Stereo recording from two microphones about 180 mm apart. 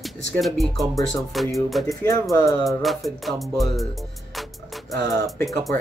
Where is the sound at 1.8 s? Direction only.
20° left (ahead or behind).